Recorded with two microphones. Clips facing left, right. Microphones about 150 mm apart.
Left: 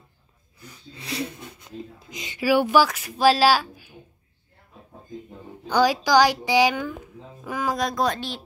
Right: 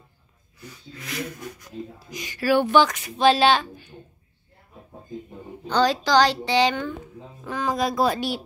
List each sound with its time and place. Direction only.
0.9 s speech: 30° left (ahead or behind)
2.4 s a woman's voice: 10° left (ahead or behind)
5.7 s a woman's voice: 10° left (ahead or behind)
7.7 s speech: 5° right (ahead or behind)